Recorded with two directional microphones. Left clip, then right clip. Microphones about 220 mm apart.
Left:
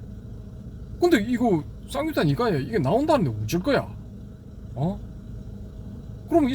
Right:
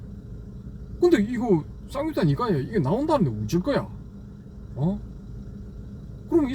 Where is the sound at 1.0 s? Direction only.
40° left (ahead or behind).